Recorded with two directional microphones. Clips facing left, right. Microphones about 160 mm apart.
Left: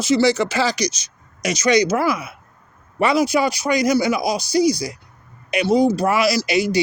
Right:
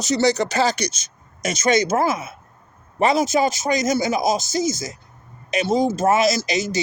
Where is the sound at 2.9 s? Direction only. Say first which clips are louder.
Left 1 dB; 45° right (ahead or behind).